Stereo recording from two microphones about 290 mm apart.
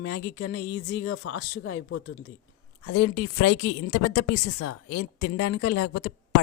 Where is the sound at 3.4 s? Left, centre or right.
Left.